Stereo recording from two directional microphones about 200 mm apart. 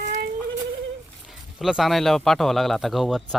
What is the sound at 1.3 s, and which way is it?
Speech, centre (ahead or behind).